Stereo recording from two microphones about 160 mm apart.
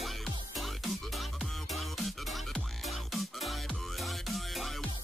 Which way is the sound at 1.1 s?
Centre (ahead or behind).